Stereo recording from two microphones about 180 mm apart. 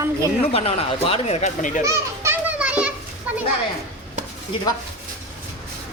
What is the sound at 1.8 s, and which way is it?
Children playing, 15° right (ahead or behind).